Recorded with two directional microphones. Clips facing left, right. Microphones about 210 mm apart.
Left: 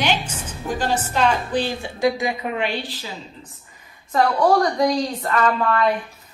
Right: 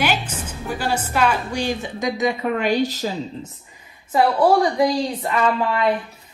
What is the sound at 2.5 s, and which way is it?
Speech, 45° right (ahead or behind).